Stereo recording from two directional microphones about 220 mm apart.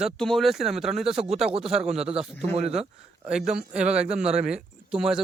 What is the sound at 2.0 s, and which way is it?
Speech, 25° right (ahead or behind).